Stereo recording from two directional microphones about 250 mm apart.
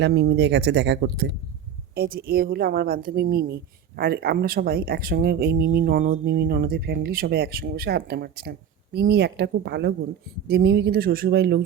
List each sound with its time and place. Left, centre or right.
0.0 s a woman's voice: right